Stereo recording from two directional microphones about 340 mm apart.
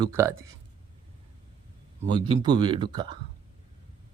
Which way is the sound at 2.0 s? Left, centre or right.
Centre.